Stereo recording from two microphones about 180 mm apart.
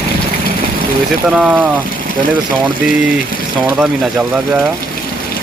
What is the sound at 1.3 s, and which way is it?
Speech, 5° right (ahead or behind).